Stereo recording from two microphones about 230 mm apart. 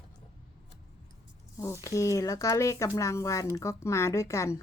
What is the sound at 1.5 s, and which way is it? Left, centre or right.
Speech, centre.